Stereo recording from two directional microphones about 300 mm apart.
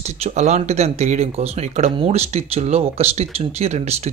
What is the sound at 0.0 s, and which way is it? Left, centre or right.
Speech, right.